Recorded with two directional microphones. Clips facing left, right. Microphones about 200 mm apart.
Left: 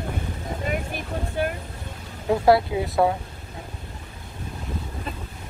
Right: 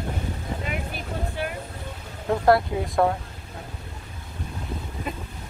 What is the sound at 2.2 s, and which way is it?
Speech, 5° left (ahead or behind).